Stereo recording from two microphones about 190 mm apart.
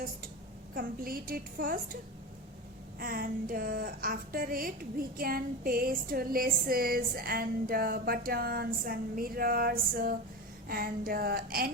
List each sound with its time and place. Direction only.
0.7 s a woman's voice: 50° right (ahead or behind)
3.0 s a woman's voice: 50° right (ahead or behind)